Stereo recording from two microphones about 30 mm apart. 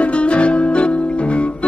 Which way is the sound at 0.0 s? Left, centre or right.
Left.